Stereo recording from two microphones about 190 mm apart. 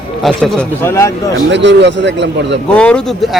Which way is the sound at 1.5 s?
65° right (ahead or behind).